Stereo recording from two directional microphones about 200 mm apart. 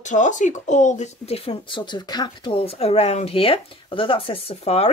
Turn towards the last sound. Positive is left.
turn(degrees=35)  # may be behind; listen again after turning